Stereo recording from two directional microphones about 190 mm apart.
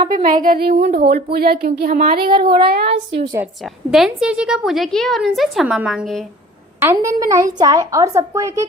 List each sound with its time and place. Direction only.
0.1 s speech: 45° right (ahead or behind); by 3.0 s 60° right (ahead or behind)
3.6 s a woman's voice: centre (ahead or behind)
6.7 s a woman's voice: 15° right (ahead or behind)